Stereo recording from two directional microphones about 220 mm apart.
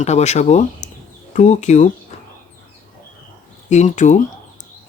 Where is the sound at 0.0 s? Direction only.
30° left (ahead or behind).